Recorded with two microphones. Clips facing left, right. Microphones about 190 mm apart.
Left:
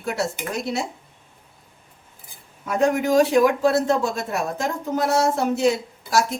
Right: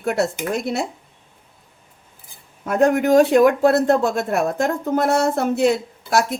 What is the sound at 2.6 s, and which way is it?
A woman's voice, 55° right (ahead or behind).